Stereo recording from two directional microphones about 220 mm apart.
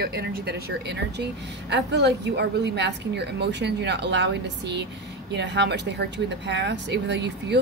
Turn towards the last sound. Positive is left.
turn(degrees=-50)  # may be behind; listen again after turning